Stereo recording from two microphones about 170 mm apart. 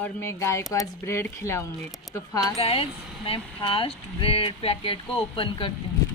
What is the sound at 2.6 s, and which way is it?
Speech, 35° left (ahead or behind).